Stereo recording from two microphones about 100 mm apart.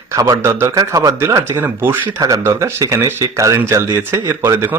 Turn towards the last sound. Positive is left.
turn(degrees=-25)  # may be behind; listen again after turning